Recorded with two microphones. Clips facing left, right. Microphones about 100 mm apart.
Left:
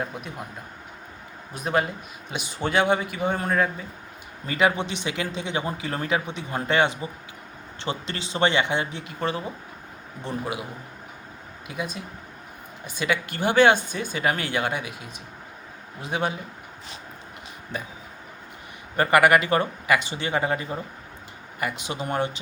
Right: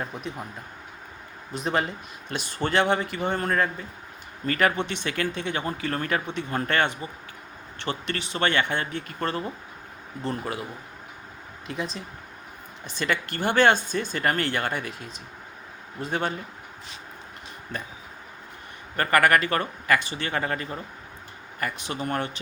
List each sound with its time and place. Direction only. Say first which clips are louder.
0.0 s speech: left 1 dB; 5° left (ahead or behind)
1.5 s speech: left 2 dB; 5° left (ahead or behind)
10.2 s speech: even; 5° left (ahead or behind)
12.8 s speech: left 1 dB; 10° left (ahead or behind)
18.9 s speech: left 3 dB; 15° left (ahead or behind)